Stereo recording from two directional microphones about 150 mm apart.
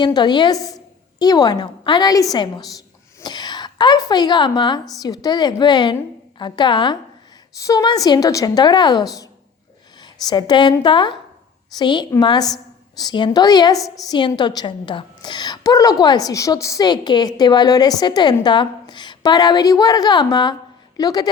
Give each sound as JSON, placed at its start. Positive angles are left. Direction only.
{"t": 0.0, "sound": "a woman's voice", "side_deg": 30}
{"t": 13.8, "sound": "a woman's voice", "side_deg": 0}
{"t": 14.1, "sound": "a woman's voice", "side_deg": 30}